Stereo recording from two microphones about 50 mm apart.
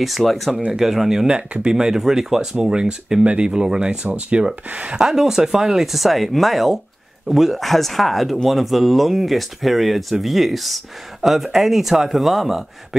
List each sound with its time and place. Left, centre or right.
0.0 s speech: centre; by 4.9 s right
4.9 s speech: centre